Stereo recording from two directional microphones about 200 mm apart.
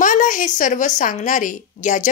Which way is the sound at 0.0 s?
40° left (ahead or behind).